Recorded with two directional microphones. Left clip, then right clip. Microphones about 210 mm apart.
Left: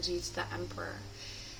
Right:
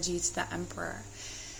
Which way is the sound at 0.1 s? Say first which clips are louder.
Right 3 dB; 40° right (ahead or behind).